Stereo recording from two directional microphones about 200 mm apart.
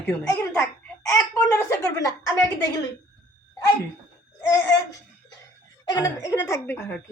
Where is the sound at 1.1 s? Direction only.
15° left (ahead or behind).